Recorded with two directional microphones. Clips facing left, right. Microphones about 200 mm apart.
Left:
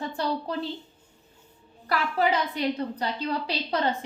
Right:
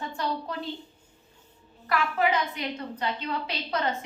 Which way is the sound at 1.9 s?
35° left (ahead or behind).